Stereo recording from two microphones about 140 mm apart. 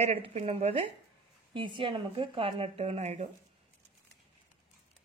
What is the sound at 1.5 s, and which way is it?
Speech, 35° right (ahead or behind).